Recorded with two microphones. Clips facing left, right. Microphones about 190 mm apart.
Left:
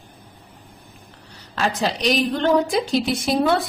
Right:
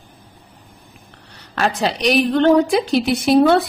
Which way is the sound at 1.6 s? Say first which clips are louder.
Right 3 dB; 65° right (ahead or behind).